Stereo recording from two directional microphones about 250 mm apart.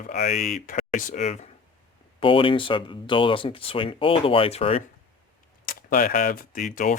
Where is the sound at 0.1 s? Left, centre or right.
Left.